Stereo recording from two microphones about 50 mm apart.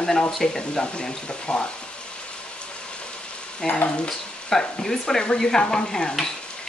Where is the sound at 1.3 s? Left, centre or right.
Left.